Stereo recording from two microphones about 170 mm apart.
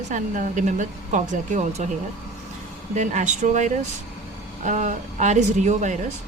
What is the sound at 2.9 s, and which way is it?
A woman's voice, 45° right (ahead or behind).